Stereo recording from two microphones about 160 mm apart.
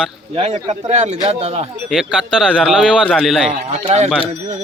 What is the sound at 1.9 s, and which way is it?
A man's voice, 5° right (ahead or behind).